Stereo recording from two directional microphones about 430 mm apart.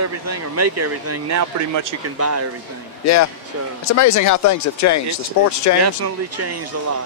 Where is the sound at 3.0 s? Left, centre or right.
Left.